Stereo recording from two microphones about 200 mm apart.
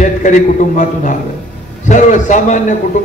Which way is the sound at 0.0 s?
40° left (ahead or behind).